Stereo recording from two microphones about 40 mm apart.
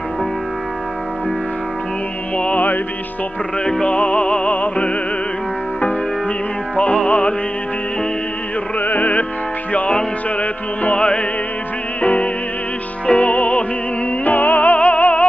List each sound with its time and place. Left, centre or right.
2.3 s music: left
3.8 s music: left
7.1 s music: left
8.7 s music: left
10.4 s music: left
11.0 s music: left
12.0 s music: left